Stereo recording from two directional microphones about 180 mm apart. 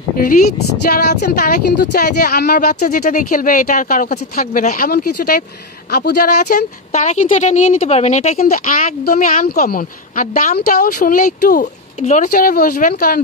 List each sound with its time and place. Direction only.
0.8 s speech: 60° left (ahead or behind)
2.7 s speech: 45° left (ahead or behind)
6.4 s a woman's voice: 40° left (ahead or behind)
8.4 s speech: 50° left (ahead or behind)